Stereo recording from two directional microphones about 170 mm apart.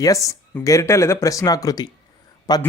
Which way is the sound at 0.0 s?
20° left (ahead or behind).